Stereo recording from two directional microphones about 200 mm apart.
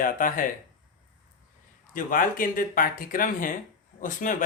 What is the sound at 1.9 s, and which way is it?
Speech, 40° left (ahead or behind).